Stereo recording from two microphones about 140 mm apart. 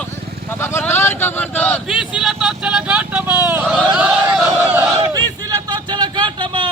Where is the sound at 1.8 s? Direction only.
5° right (ahead or behind).